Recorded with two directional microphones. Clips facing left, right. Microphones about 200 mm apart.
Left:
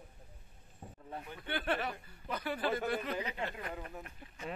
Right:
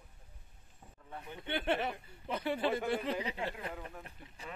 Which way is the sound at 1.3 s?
20° right (ahead or behind).